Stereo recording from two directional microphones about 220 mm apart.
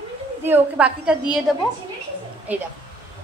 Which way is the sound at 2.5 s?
5° right (ahead or behind).